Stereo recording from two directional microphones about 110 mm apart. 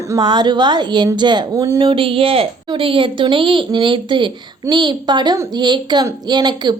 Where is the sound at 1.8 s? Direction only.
55° right (ahead or behind).